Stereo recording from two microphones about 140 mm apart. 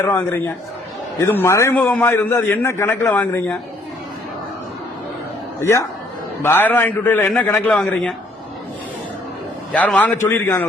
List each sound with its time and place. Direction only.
0.0 s a man's voice: 15° left (ahead or behind)
5.5 s a man's voice: 20° left (ahead or behind); by 8.1 s 5° left (ahead or behind)
9.7 s a man's voice: 10° left (ahead or behind)